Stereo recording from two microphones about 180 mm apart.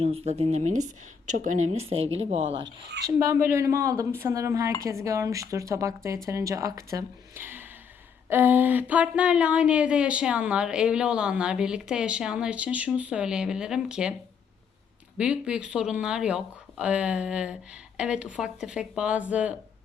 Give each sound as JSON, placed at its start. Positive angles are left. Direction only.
{"t": 0.0, "sound": "a woman's voice", "side_deg": -35}
{"t": 2.6, "sound": "speech", "side_deg": -75}
{"t": 3.2, "sound": "speech", "side_deg": -15}
{"t": 15.2, "sound": "speech", "side_deg": -5}